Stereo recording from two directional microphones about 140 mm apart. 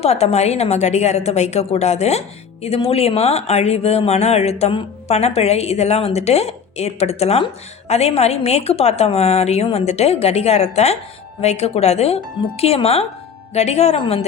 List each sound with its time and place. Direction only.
0.0 s a woman's voice: 50° left (ahead or behind)